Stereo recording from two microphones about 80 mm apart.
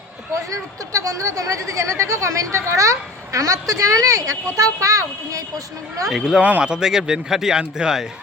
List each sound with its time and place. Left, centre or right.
0.5 s speech: right
6.1 s speech: centre
6.4 s a man's voice: centre